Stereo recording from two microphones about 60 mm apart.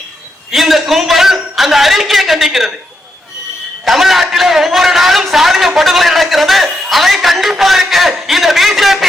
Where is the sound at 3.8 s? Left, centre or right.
Centre.